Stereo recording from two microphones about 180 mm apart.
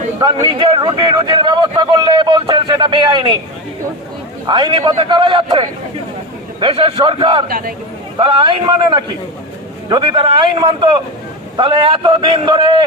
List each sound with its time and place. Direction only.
0.4 s speech: 25° right (ahead or behind)
4.4 s speech: 25° right (ahead or behind)
7.4 s speech: 50° right (ahead or behind)
8.2 s speech: 30° right (ahead or behind)